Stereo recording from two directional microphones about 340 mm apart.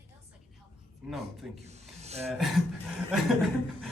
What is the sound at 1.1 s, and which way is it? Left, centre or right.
Speech, centre.